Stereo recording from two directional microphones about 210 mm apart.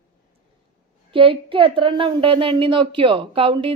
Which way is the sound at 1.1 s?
25° right (ahead or behind).